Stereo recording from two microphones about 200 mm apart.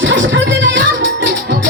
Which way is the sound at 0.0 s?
70° right (ahead or behind).